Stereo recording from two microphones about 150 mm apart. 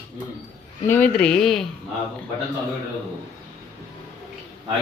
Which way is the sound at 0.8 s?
15° left (ahead or behind).